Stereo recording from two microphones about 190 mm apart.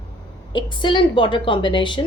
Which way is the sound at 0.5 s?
25° left (ahead or behind).